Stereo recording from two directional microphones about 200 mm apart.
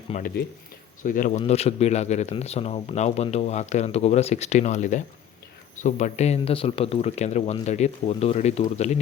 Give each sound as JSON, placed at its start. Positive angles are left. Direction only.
{"t": 0.1, "sound": "speech", "side_deg": 30}
{"t": 1.0, "sound": "speech", "side_deg": 40}